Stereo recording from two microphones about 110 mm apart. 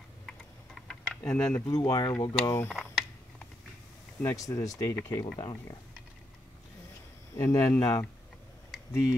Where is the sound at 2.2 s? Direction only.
35° left (ahead or behind).